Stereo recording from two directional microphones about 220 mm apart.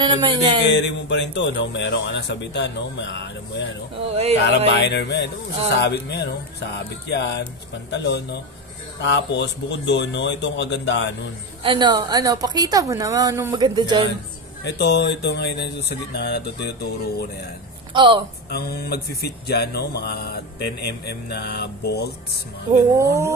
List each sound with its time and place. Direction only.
0.0 s speech: 20° right (ahead or behind)
0.7 s speech: 55° left (ahead or behind)
4.1 s speech: 30° right (ahead or behind)
4.6 s speech: 50° left (ahead or behind)
11.6 s a woman's voice: 20° right (ahead or behind)
14.6 s speech: 50° left (ahead or behind)
17.9 s speech: 20° right (ahead or behind)
18.5 s speech: 45° left (ahead or behind)
22.9 s a woman's voice: 15° right (ahead or behind)